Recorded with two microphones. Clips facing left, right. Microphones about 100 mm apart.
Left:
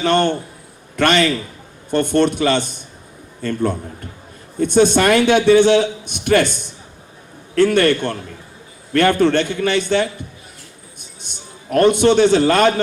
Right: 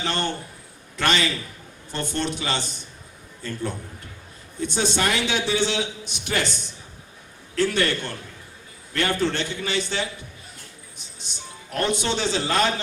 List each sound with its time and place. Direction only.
0.0 s a man's voice: 55° left (ahead or behind)
11.2 s a man's voice: 55° left (ahead or behind)